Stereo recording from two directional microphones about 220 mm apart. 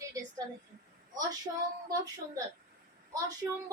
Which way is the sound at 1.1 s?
15° right (ahead or behind).